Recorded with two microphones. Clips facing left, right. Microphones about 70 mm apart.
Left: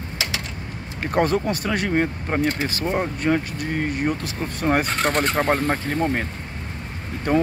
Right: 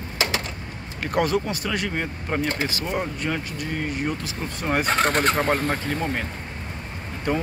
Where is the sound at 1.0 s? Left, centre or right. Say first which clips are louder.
Left 2 dB; left.